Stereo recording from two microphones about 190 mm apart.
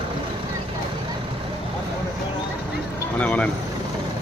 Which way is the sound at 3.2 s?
5° left (ahead or behind).